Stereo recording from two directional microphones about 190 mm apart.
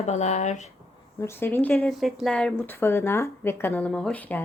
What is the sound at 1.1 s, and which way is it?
Speech, 10° left (ahead or behind).